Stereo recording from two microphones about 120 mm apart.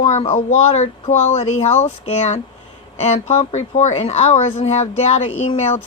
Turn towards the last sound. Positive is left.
turn(degrees=65)  # may be behind; listen again after turning